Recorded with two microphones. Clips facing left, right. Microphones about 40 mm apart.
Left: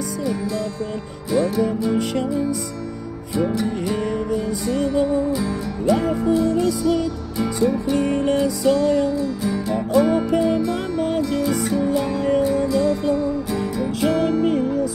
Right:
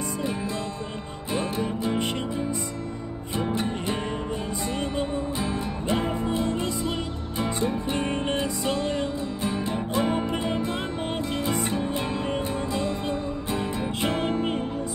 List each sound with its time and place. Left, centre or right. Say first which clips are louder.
1.3 s music: left 8 dB; right
3.5 s music: left 5 dB; right